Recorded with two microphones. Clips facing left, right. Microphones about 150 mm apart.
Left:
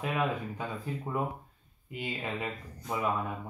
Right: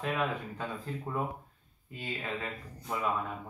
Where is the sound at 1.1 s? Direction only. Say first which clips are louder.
Left 1 dB; 15° left (ahead or behind).